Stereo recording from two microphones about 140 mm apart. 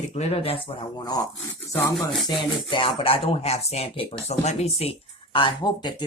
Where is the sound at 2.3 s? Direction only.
35° left (ahead or behind).